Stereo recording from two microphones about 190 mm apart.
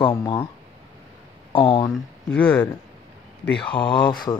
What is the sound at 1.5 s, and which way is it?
Speech, 25° left (ahead or behind).